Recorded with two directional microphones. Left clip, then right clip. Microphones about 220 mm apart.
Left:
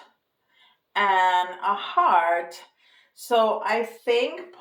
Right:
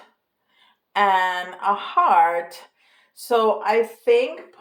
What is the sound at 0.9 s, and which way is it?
Speech, 45° right (ahead or behind).